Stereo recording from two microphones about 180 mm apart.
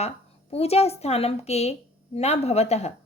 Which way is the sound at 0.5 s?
35° left (ahead or behind).